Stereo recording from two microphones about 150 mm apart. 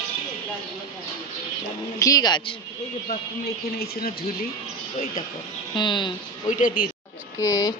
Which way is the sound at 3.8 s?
90° left.